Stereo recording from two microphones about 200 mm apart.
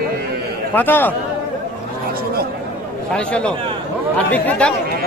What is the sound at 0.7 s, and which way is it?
Speech, 10° left (ahead or behind).